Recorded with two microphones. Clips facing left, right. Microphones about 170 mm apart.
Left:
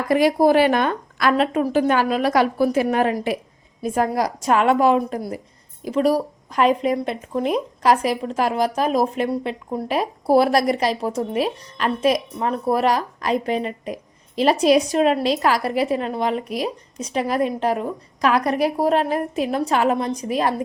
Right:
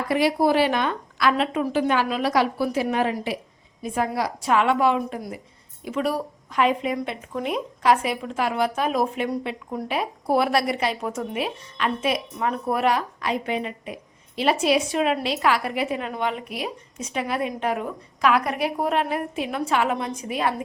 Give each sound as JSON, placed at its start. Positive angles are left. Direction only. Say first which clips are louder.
{"t": 0.1, "sound": "a woman's voice", "louder": "left 5 dB", "side_deg": 45}